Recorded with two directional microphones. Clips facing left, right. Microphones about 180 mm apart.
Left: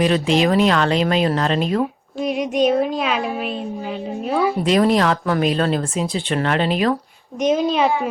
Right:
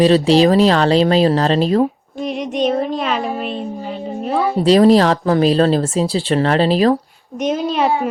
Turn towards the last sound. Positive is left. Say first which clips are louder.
# left 1 dB
turn(degrees=0)  # may be behind; listen again after turning